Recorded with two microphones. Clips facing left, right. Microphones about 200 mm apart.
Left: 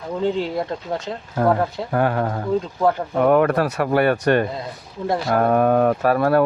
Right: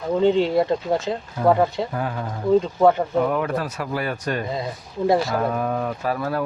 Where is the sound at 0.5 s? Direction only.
5° right (ahead or behind).